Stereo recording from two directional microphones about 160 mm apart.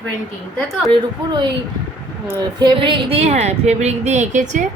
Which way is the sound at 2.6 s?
30° right (ahead or behind).